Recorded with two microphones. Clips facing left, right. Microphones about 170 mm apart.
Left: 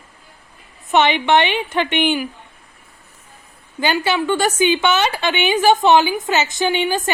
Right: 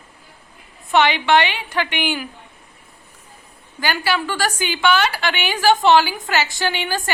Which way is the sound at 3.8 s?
20° left (ahead or behind).